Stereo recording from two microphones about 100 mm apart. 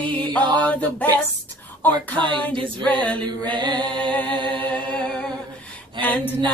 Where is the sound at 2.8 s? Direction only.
15° left (ahead or behind).